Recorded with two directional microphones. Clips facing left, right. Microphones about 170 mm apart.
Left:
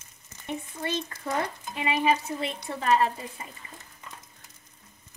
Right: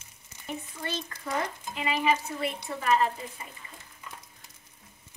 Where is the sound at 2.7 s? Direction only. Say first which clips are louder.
Left 1 dB; 35° left (ahead or behind).